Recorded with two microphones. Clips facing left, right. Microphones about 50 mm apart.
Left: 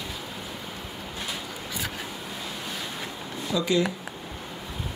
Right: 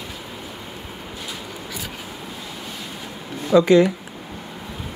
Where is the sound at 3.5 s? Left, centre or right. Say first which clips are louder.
Right 11 dB; right.